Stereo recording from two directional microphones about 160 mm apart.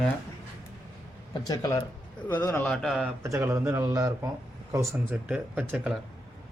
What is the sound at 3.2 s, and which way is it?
Speech, 15° right (ahead or behind).